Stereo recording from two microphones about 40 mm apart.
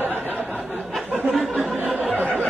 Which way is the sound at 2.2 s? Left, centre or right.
Left.